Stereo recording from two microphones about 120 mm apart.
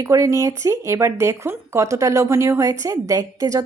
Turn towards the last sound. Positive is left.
turn(degrees=-30)  # may be behind; listen again after turning